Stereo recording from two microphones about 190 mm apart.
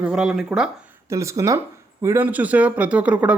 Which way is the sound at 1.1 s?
15° right (ahead or behind).